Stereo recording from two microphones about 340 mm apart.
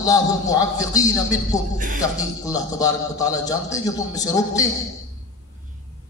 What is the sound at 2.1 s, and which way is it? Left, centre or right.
A man's voice, centre.